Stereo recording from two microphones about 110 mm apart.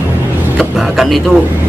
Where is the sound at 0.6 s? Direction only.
Centre (ahead or behind).